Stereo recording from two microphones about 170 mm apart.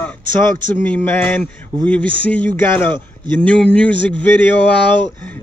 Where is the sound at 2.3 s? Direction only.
10° left (ahead or behind).